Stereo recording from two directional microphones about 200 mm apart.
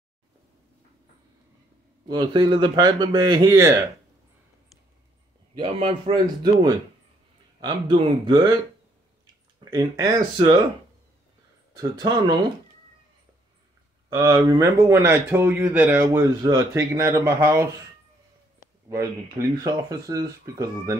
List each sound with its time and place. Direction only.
2.0 s speech: 20° right (ahead or behind)
5.6 s speech: 25° right (ahead or behind)
9.2 s a sound: 20° right (ahead or behind)
11.7 s speech: 20° right (ahead or behind)
14.0 s speech: 15° right (ahead or behind)
18.9 s speech: 15° right (ahead or behind)